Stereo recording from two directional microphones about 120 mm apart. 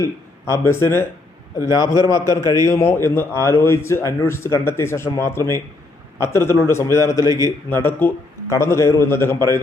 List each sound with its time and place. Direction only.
0.0 s speech: 25° left (ahead or behind)
1.5 s a man's voice: 35° left (ahead or behind)